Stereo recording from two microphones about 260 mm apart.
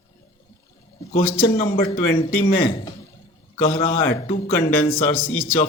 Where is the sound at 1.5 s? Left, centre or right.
Left.